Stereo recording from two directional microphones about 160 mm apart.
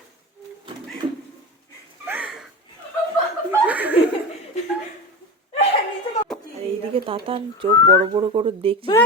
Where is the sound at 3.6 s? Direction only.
10° right (ahead or behind).